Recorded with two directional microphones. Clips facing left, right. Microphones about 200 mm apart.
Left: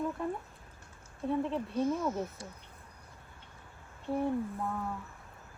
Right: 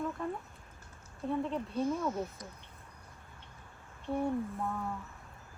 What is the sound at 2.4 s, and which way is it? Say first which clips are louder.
Speech: left 2 dB; 30° left (ahead or behind).